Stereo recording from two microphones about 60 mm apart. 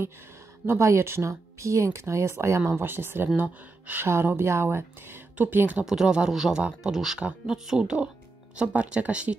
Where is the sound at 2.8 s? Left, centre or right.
Right.